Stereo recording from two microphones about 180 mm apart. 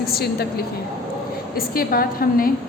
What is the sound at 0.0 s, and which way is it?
Speech, 60° left (ahead or behind).